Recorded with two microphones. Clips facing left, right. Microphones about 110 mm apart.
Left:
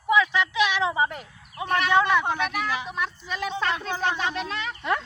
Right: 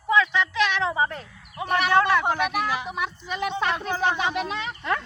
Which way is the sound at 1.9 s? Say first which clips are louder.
Right 1 dB; centre (ahead or behind).